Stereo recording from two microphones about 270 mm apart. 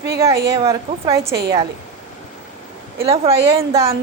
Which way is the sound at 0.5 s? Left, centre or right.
Centre.